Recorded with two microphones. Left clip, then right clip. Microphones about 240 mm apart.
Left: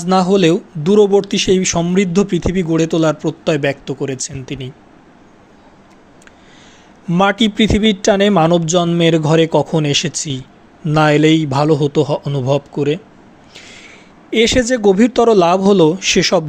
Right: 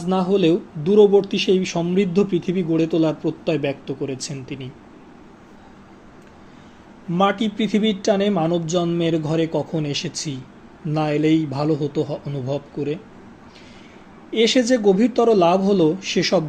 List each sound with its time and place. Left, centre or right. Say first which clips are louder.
0.0 s speech: left 6 dB; left
7.1 s speech: left 6 dB; left
13.6 s a sound: left 12 dB; left
14.3 s speech: left 4 dB; left